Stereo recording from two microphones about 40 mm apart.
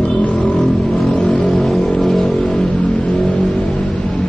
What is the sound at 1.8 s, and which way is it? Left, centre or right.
Music, centre.